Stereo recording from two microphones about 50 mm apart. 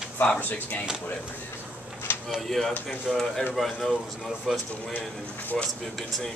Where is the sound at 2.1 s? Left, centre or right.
Left.